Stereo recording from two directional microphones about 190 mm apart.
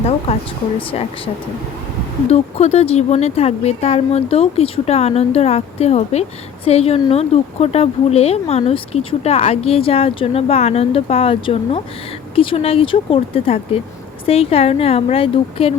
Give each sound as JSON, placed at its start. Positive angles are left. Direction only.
{"t": 0.3, "sound": "speech", "side_deg": 35}
{"t": 2.3, "sound": "speech", "side_deg": 35}